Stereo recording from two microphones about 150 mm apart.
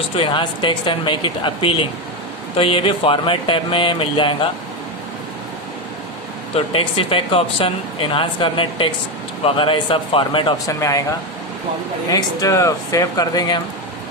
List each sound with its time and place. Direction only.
0.2 s speech: 35° left (ahead or behind)
6.5 s speech: 40° left (ahead or behind)
10.7 s speech: 20° left (ahead or behind)
12.0 s speech: 25° left (ahead or behind)